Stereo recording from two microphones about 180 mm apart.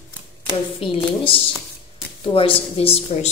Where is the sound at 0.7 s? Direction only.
30° left (ahead or behind).